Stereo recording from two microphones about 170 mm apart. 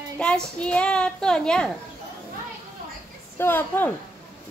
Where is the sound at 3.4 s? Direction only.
10° left (ahead or behind).